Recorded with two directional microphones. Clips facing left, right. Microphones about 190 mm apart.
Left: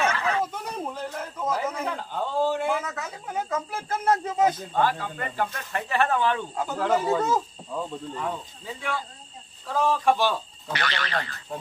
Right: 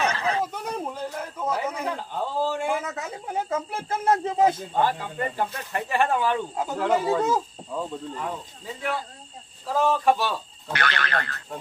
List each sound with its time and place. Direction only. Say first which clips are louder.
0.0 s a sound: even; 35° right (ahead or behind)
0.4 s a sound: right 2 dB; 10° right (ahead or behind)
2.0 s a man's voice: left 1 dB; 10° right (ahead or behind)
2.8 s speech: right 2 dB; 25° right (ahead or behind)
6.9 s speech: right 1 dB; 5° right (ahead or behind)
10.8 s speech: right 2 dB; 55° right (ahead or behind)